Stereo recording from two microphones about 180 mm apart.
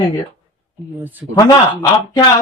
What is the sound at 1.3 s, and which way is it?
Speech, 25° left (ahead or behind).